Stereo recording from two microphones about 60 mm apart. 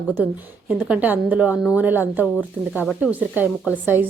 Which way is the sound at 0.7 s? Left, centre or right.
Right.